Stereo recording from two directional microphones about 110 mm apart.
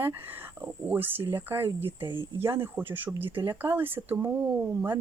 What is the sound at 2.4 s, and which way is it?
Speech, 20° right (ahead or behind).